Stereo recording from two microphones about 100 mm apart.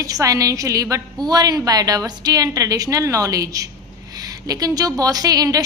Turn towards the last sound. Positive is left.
turn(degrees=-40)  # may be behind; listen again after turning